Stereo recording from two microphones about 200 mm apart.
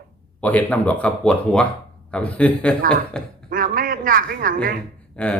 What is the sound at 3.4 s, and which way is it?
A man's voice, 45° right (ahead or behind).